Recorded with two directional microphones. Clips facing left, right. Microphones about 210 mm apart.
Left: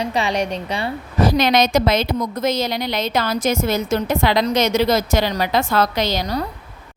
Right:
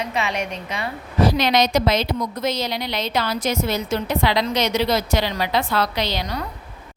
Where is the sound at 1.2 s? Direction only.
45° left (ahead or behind).